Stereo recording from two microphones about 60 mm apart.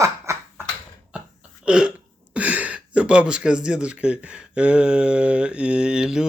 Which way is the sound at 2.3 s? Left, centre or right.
Right.